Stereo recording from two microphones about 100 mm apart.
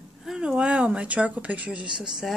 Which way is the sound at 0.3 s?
10° right (ahead or behind).